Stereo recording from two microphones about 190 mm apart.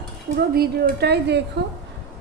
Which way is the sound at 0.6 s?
55° right (ahead or behind).